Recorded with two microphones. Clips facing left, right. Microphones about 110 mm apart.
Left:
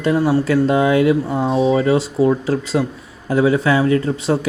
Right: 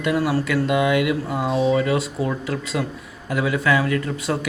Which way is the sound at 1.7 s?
30° left (ahead or behind).